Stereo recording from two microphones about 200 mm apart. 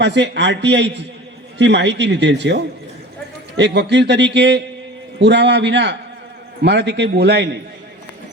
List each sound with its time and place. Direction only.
0.0 s a man's voice: 60° right (ahead or behind)
3.6 s a man's voice: 60° right (ahead or behind)